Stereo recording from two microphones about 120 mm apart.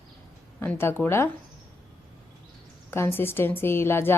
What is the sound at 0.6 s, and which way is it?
Speech, 20° left (ahead or behind).